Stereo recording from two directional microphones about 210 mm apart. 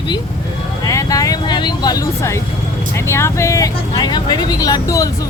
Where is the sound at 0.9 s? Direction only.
15° left (ahead or behind).